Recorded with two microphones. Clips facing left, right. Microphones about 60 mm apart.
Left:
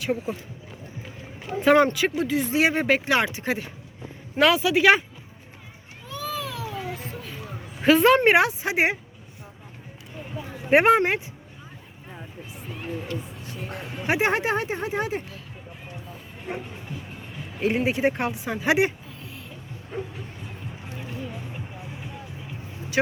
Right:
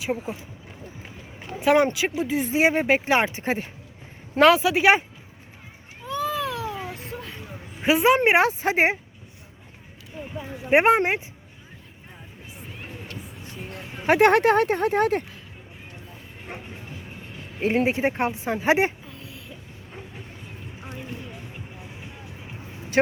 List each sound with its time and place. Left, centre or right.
0.0 s speech: centre
1.4 s speech: centre
2.2 s speech: right
7.8 s a woman's voice: centre
8.4 s speech: right
10.7 s speech: right
14.1 s speech: right
16.5 s speech: centre
17.6 s speech: right